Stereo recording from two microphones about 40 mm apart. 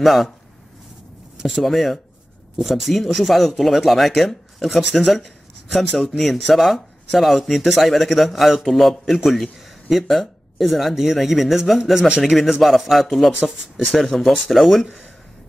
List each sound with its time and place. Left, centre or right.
0.0 s speech: centre
1.6 s speech: centre
12.2 s speech: centre
13.4 s speech: centre
13.9 s speech: centre